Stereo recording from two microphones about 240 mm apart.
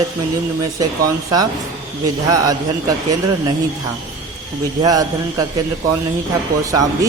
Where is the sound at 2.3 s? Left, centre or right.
Centre.